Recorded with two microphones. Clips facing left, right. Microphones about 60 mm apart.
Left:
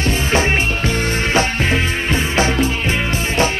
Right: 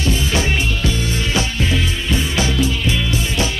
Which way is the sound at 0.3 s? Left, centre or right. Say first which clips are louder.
Left 3 dB; left.